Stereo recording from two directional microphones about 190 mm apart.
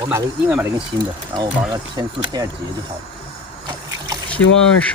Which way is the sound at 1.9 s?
20° right (ahead or behind).